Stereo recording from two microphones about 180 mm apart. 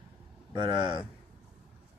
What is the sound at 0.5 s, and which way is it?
Speech, 25° right (ahead or behind).